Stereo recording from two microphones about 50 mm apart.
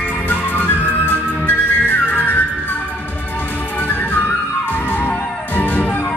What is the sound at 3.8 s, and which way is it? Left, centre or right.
Music, left.